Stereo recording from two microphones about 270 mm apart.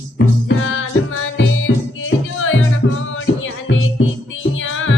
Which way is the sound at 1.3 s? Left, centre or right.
Left.